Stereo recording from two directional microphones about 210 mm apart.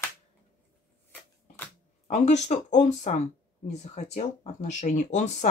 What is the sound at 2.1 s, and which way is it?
Speech, 35° left (ahead or behind).